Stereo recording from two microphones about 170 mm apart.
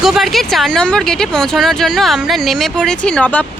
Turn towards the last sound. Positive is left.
turn(degrees=5)  # may be behind; listen again after turning